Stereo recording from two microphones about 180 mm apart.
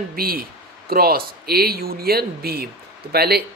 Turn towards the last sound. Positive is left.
turn(degrees=-60)  # may be behind; listen again after turning